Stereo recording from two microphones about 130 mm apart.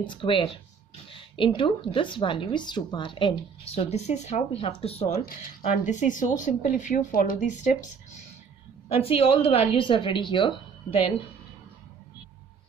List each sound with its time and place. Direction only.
0.0 s a woman's voice: 40° left (ahead or behind)
5.6 s speech: 65° left (ahead or behind)
8.8 s a woman's voice: 45° left (ahead or behind)